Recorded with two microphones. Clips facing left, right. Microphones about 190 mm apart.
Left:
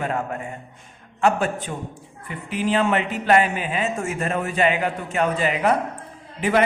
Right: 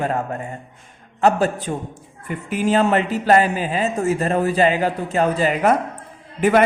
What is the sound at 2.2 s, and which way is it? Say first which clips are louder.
Speech: right 4 dB; 45° right (ahead or behind).